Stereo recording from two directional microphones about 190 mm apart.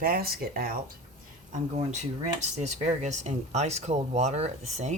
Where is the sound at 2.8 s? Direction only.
35° right (ahead or behind).